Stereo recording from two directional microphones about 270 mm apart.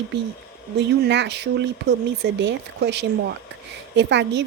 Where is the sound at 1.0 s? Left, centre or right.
Right.